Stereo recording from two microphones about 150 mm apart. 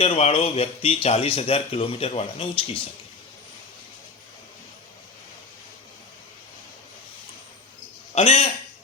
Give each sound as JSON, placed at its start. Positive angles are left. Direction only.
{"t": 0.0, "sound": "speech", "side_deg": 45}
{"t": 8.1, "sound": "a man's voice", "side_deg": 45}